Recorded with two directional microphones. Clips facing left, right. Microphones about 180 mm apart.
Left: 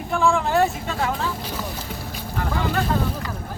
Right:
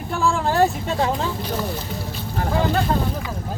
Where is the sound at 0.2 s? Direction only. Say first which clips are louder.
Right 1 dB; 35° right (ahead or behind).